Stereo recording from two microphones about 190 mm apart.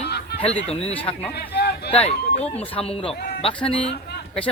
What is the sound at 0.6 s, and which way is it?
Speech, 35° left (ahead or behind).